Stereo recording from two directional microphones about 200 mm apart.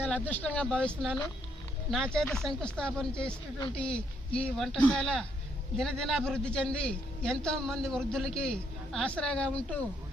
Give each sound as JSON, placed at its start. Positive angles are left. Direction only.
{"t": 0.0, "sound": "a man's voice", "side_deg": 5}